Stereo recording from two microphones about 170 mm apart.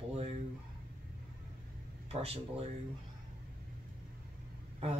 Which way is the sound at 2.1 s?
35° right (ahead or behind).